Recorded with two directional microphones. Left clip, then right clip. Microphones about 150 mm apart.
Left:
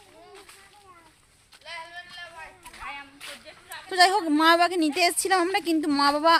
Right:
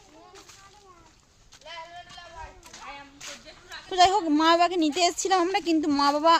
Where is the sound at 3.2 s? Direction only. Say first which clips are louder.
Left 1 dB; centre (ahead or behind).